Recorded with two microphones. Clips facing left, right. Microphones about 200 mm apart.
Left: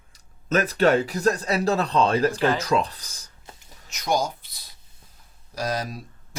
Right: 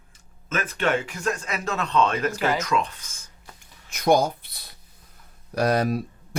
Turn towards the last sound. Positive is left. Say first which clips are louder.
# right 7 dB
turn(degrees=-60)  # may be behind; listen again after turning